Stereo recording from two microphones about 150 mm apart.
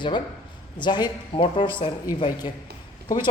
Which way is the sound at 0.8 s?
30° left (ahead or behind).